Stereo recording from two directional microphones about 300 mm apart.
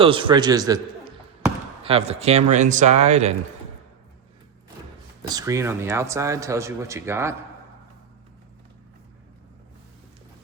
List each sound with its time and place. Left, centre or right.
0.0 s speech: centre
1.8 s speech: centre
5.3 s speech: centre